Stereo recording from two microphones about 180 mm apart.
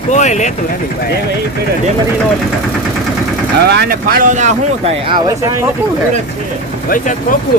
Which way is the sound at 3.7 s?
60° right (ahead or behind).